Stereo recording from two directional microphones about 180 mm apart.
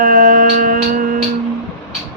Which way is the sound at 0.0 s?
50° right (ahead or behind).